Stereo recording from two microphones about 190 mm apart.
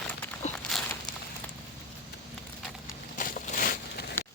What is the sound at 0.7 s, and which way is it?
Walk, centre (ahead or behind).